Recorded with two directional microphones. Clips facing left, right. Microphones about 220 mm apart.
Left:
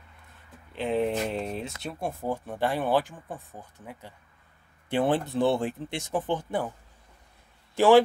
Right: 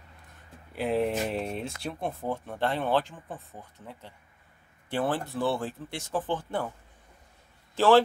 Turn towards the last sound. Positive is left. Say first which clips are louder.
# left 2 dB
turn(degrees=15)  # may be behind; listen again after turning